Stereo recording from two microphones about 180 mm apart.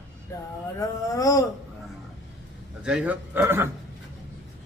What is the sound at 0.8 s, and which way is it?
Speech, 20° left (ahead or behind).